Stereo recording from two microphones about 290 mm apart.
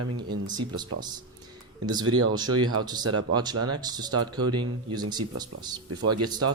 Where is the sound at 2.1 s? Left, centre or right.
Right.